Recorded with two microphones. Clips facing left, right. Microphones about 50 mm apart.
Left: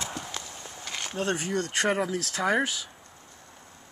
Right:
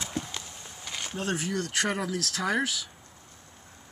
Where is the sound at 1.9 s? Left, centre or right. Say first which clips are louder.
Left 3 dB; centre.